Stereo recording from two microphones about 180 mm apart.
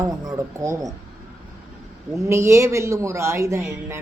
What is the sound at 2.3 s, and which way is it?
A woman's voice, 15° right (ahead or behind).